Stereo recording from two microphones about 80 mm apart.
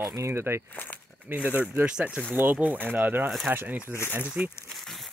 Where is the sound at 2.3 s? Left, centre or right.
Right.